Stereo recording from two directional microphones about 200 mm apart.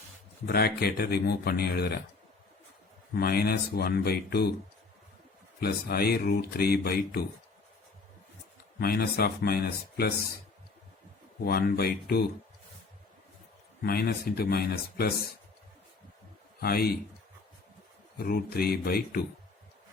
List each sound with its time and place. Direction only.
0.4 s speech: 50° left (ahead or behind)
3.2 s speech: 50° left (ahead or behind)
5.5 s speech: 50° left (ahead or behind)
8.8 s speech: 50° left (ahead or behind)
11.4 s speech: 50° left (ahead or behind)
13.8 s speech: 50° left (ahead or behind)
16.6 s a man's voice: 50° left (ahead or behind)
18.2 s speech: 50° left (ahead or behind)